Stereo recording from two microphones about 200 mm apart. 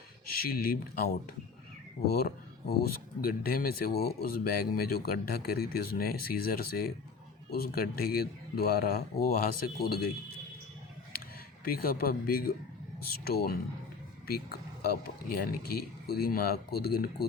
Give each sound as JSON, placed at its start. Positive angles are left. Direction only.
{"t": 0.5, "sound": "speech", "side_deg": 45}
{"t": 2.1, "sound": "speech", "side_deg": 50}
{"t": 11.6, "sound": "speech", "side_deg": 45}